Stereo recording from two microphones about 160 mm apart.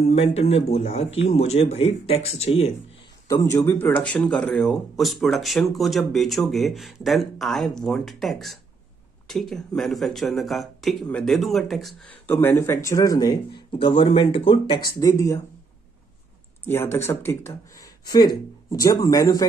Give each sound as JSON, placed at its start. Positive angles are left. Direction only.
{"t": 0.1, "sound": "speech", "side_deg": 40}
{"t": 3.3, "sound": "speech", "side_deg": 20}
{"t": 12.3, "sound": "speech", "side_deg": 10}
{"t": 15.0, "sound": "speech", "side_deg": 20}
{"t": 16.6, "sound": "speech", "side_deg": 15}